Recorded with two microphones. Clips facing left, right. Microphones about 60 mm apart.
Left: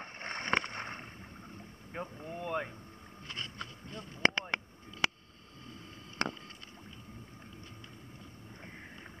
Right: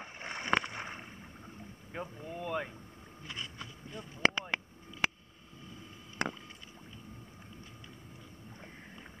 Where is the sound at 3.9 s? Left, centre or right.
Centre.